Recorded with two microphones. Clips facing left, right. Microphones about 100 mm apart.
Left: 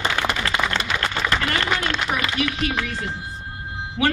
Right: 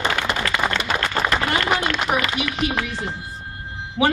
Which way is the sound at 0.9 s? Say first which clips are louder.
Right 2 dB; 40° right (ahead or behind).